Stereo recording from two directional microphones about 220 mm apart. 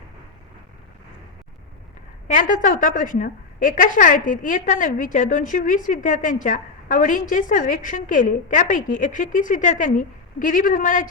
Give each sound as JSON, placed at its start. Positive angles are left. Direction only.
{"t": 2.2, "sound": "a woman's voice", "side_deg": 35}